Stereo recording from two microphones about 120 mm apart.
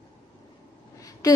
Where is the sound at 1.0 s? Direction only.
30° left (ahead or behind).